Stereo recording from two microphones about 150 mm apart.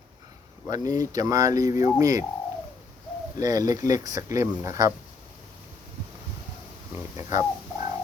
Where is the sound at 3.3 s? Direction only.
25° right (ahead or behind).